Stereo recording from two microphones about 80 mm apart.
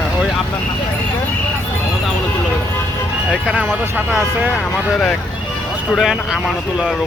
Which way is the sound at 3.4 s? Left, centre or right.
Centre.